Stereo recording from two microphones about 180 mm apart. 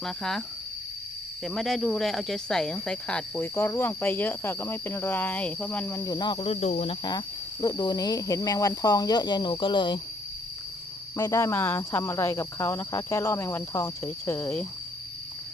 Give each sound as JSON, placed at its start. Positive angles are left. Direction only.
{"t": 0.0, "sound": "speech", "side_deg": 0}
{"t": 1.5, "sound": "speech", "side_deg": 0}
{"t": 7.0, "sound": "cricket", "side_deg": 25}
{"t": 11.2, "sound": "speech", "side_deg": 15}